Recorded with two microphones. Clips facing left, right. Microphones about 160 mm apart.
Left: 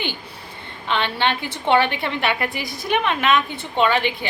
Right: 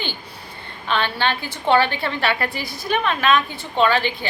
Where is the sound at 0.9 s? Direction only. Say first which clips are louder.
Even; 25° left (ahead or behind).